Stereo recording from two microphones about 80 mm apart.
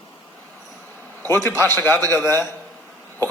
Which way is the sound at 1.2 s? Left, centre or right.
Left.